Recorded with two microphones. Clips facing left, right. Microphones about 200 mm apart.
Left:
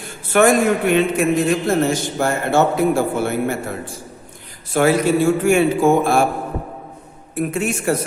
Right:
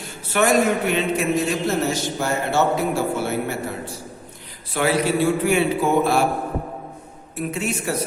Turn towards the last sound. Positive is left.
turn(degrees=50)  # may be behind; listen again after turning